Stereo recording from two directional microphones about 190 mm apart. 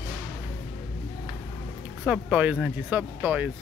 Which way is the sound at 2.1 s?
5° right (ahead or behind).